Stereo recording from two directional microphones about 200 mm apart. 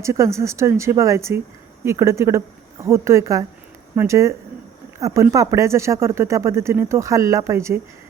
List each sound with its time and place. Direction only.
0.0 s speech: 15° right (ahead or behind)